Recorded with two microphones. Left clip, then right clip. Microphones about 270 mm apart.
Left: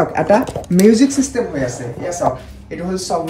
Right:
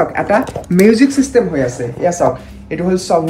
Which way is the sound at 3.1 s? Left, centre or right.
Centre.